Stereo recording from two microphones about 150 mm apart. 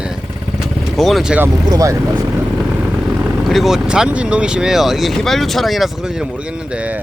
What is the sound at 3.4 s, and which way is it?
Speech, centre (ahead or behind).